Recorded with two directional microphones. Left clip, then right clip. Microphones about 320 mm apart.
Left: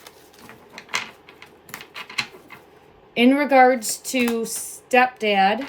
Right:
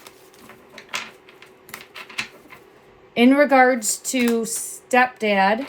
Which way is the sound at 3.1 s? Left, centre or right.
Centre.